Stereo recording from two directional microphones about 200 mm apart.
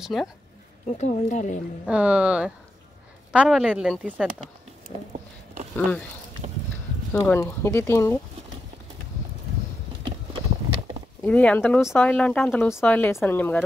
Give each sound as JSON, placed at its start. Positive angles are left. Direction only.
{"t": 0.0, "sound": "speech", "side_deg": 0}
{"t": 0.9, "sound": "speech", "side_deg": 35}
{"t": 1.9, "sound": "speech", "side_deg": -5}
{"t": 7.1, "sound": "speech", "side_deg": 10}
{"t": 11.2, "sound": "speech", "side_deg": 5}